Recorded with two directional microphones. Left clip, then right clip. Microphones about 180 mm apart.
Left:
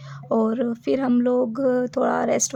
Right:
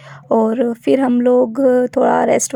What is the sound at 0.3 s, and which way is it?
Speech, 30° right (ahead or behind).